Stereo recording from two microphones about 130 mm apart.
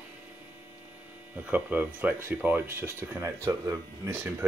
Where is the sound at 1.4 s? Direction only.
10° right (ahead or behind).